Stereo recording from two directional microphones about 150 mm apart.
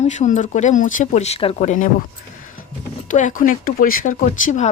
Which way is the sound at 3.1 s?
60° left (ahead or behind).